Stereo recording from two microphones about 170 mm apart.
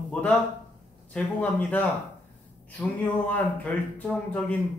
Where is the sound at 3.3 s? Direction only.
5° left (ahead or behind).